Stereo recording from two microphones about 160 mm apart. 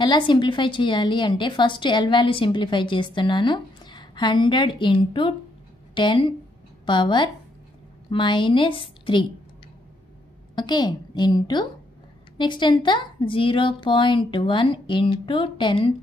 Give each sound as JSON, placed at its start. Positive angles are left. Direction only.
{"t": 0.0, "sound": "a woman's voice", "side_deg": 30}
{"t": 10.5, "sound": "a woman's voice", "side_deg": 25}